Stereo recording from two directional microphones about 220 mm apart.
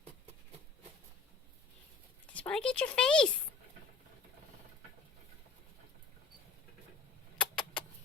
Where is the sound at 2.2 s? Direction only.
5° left (ahead or behind).